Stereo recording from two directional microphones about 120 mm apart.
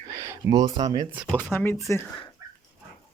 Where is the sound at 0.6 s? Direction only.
35° right (ahead or behind).